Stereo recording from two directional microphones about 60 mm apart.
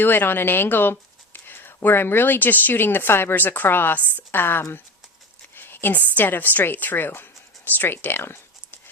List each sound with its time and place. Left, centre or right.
0.0 s speech: left
5.5 s a sound: left
6.1 s speech: left